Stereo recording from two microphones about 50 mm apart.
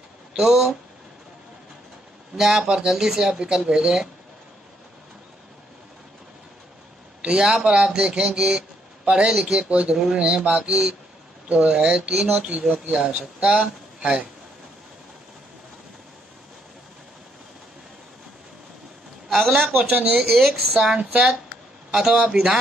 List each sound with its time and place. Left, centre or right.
0.3 s speech: centre
2.3 s speech: centre
7.2 s speech: centre
9.6 s speech: right
19.2 s a man's voice: centre
21.0 s speech: centre